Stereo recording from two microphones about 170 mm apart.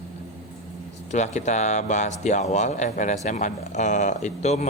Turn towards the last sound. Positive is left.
turn(degrees=40)  # may be behind; listen again after turning